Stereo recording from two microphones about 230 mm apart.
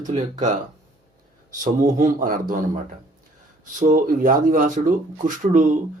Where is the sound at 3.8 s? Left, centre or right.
Right.